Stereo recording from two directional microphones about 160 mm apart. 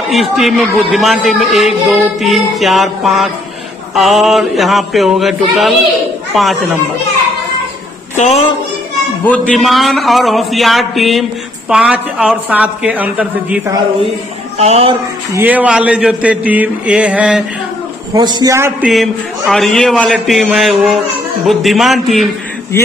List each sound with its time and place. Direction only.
0.1 s speech: centre (ahead or behind)
9.2 s speech: 10° left (ahead or behind); by 13.6 s 10° right (ahead or behind)
14.6 s speech: 40° right (ahead or behind)
15.3 s speech: 10° right (ahead or behind)
18.1 s a man's voice: 25° right (ahead or behind)
19.5 s speech: 5° left (ahead or behind)